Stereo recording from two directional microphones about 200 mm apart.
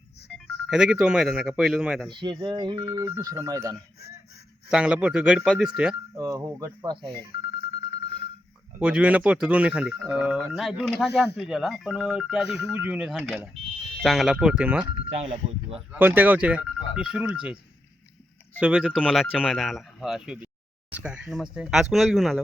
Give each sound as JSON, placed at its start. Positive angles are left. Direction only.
{"t": 0.3, "sound": "speech", "side_deg": 0}
{"t": 2.0, "sound": "speech", "side_deg": -25}
{"t": 4.7, "sound": "speech", "side_deg": -5}
{"t": 6.1, "sound": "speech", "side_deg": -15}
{"t": 8.8, "sound": "speech", "side_deg": -5}
{"t": 14.8, "sound": "speech", "side_deg": -30}
{"t": 15.9, "sound": "speech", "side_deg": -10}
{"t": 18.6, "sound": "speech", "side_deg": -5}